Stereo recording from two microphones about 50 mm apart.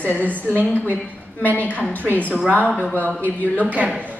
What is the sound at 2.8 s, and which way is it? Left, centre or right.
Speech, left.